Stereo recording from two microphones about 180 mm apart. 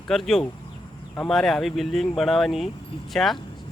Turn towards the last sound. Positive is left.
turn(degrees=0)  # may be behind; listen again after turning